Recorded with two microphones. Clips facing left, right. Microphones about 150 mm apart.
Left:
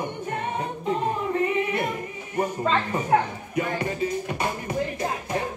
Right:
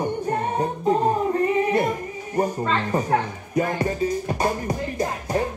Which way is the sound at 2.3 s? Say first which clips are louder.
Right 1 dB; 35° right (ahead or behind).